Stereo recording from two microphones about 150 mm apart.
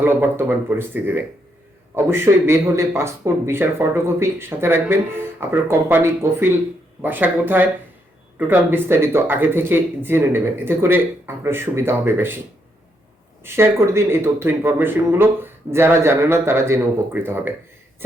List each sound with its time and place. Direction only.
0.0 s speech: 15° right (ahead or behind)
13.4 s speech: 15° right (ahead or behind)